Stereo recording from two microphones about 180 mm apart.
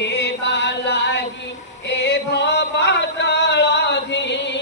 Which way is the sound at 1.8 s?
75° left (ahead or behind).